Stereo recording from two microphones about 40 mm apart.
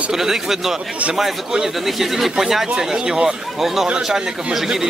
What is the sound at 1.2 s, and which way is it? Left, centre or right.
Speech, centre.